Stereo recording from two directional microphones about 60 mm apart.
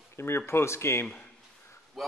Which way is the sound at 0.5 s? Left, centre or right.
Left.